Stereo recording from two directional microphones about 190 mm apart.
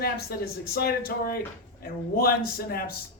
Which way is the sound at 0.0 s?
55° left (ahead or behind).